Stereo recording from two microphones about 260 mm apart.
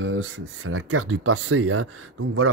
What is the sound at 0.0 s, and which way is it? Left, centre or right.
Speech, right.